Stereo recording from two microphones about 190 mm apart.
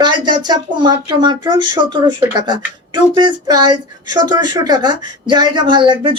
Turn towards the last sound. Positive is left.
turn(degrees=-25)  # may be behind; listen again after turning